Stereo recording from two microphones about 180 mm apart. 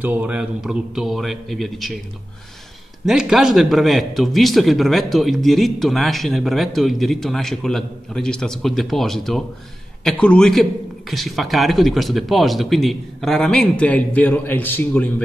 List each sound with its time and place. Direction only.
0.0 s a man's voice: 10° right (ahead or behind)
3.1 s a man's voice: centre (ahead or behind)